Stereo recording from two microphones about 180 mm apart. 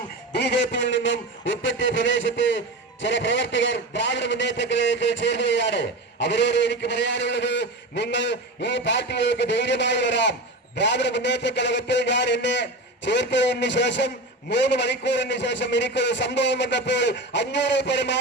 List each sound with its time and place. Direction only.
0.3 s a man's voice: 75° left (ahead or behind)